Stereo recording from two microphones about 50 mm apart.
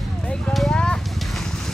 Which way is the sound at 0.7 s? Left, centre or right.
Centre.